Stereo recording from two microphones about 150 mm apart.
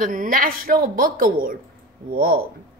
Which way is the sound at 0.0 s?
60° right (ahead or behind).